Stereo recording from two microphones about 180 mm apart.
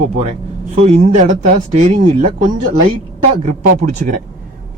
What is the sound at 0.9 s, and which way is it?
Speech, 35° right (ahead or behind).